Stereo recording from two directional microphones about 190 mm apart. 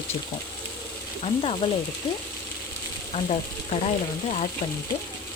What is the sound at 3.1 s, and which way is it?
Speech, 35° left (ahead or behind).